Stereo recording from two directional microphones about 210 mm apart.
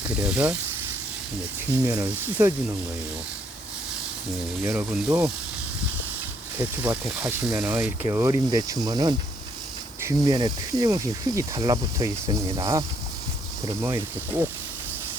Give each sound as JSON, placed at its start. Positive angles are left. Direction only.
{"t": 0.2, "sound": "speech", "side_deg": -5}
{"t": 1.7, "sound": "speech", "side_deg": -10}
{"t": 4.6, "sound": "speech", "side_deg": -10}
{"t": 6.6, "sound": "speech", "side_deg": -10}
{"t": 13.8, "sound": "speech", "side_deg": -10}